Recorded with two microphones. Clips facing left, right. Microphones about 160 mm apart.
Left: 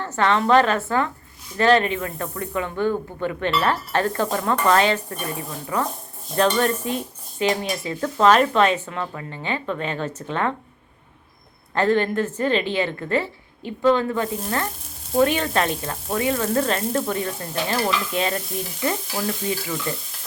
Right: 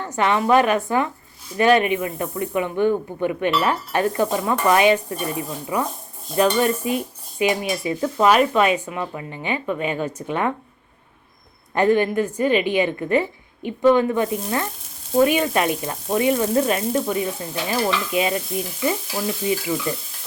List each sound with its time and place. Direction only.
0.0 s speech: 15° right (ahead or behind)
11.7 s speech: 15° right (ahead or behind)